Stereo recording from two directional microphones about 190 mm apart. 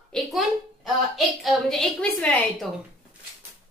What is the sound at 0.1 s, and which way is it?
A woman's voice, centre (ahead or behind).